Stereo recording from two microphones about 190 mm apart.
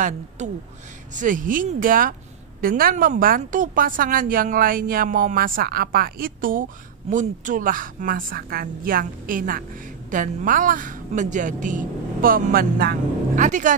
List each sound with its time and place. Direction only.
0.4 s a woman's voice: 40° right (ahead or behind)